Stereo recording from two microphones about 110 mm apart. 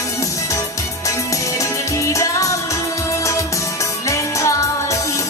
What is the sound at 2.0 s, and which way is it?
Music, 30° left (ahead or behind).